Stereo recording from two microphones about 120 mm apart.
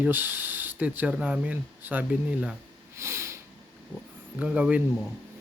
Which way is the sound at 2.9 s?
25° right (ahead or behind).